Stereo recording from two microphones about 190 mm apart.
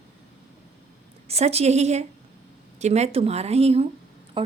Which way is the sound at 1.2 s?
35° right (ahead or behind).